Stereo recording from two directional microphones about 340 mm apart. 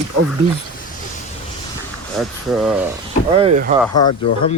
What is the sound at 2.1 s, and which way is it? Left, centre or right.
Speech, centre.